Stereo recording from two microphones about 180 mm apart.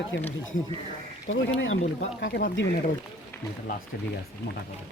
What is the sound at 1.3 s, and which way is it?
Speech, 90° left.